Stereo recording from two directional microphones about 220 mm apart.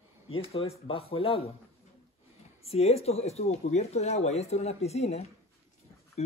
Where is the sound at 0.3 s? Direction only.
25° left (ahead or behind).